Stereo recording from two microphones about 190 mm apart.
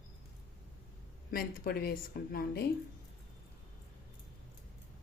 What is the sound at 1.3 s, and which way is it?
Speech, 50° left (ahead or behind).